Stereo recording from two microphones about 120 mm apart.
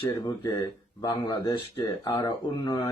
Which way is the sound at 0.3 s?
40° left (ahead or behind).